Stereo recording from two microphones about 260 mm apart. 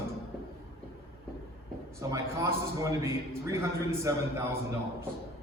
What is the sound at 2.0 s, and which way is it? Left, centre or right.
A man's voice, centre.